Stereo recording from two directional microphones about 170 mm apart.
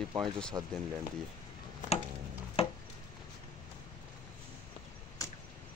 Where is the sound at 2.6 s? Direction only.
35° left (ahead or behind).